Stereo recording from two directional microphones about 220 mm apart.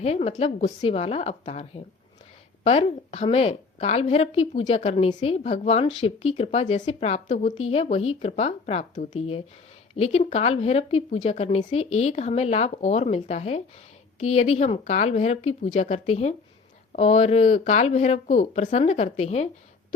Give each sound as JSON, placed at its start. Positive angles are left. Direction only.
{"t": 0.0, "sound": "speech", "side_deg": 30}